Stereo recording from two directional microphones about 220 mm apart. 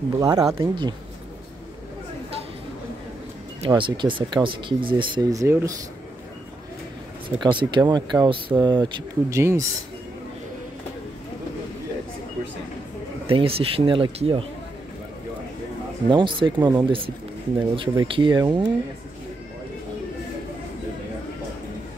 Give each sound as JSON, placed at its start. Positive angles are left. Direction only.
{"t": 0.2, "sound": "speech", "side_deg": -20}
{"t": 3.6, "sound": "speech", "side_deg": -20}
{"t": 7.2, "sound": "speech", "side_deg": -20}
{"t": 13.3, "sound": "speech", "side_deg": -25}
{"t": 16.1, "sound": "speech", "side_deg": -20}